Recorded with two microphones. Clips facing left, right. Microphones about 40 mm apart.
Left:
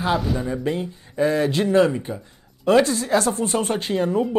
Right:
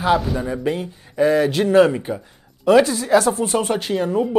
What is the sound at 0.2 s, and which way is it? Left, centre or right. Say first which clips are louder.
Speech: right 1 dB; centre.